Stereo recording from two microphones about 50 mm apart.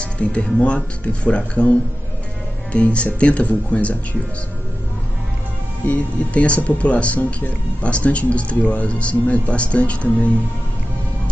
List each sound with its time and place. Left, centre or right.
0.0 s music: left
0.7 s speech: left
5.9 s speech: left